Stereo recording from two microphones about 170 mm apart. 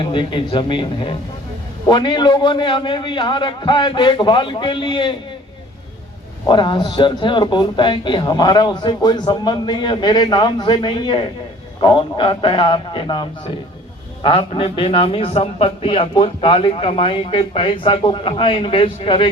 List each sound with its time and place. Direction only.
0.0 s a man's voice: 30° left (ahead or behind)
6.5 s a man's voice: 25° left (ahead or behind)